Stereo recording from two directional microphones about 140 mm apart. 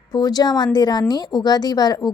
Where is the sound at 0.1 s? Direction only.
30° left (ahead or behind).